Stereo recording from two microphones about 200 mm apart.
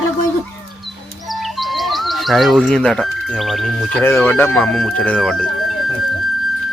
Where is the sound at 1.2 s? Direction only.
Centre (ahead or behind).